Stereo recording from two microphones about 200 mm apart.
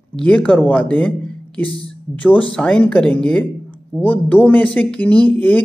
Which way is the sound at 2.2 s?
5° left (ahead or behind).